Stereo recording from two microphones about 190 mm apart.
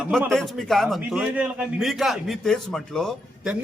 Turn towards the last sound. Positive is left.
turn(degrees=0)  # may be behind; listen again after turning